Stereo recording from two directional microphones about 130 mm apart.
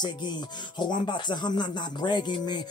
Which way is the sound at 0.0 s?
35° left (ahead or behind).